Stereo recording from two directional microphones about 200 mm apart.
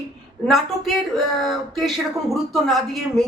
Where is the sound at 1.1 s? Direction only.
Centre (ahead or behind).